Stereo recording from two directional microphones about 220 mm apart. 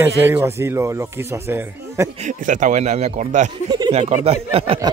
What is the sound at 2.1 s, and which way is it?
Speech, 35° right (ahead or behind).